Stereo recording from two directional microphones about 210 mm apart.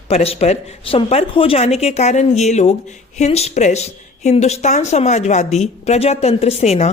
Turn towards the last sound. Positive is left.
turn(degrees=30)  # may be behind; listen again after turning